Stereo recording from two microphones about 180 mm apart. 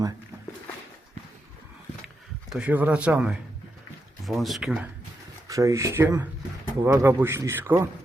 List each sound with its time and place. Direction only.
2.5 s a man's voice: 5° right (ahead or behind)
5.5 s a man's voice: 20° right (ahead or behind)